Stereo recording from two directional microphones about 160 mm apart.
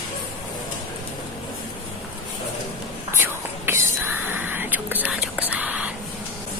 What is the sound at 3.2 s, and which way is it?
Whispering, 15° right (ahead or behind).